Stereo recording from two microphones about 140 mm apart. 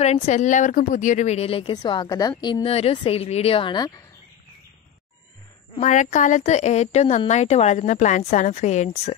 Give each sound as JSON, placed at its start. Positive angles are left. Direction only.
{"t": 0.0, "sound": "a woman's voice", "side_deg": 50}
{"t": 5.8, "sound": "speech", "side_deg": 60}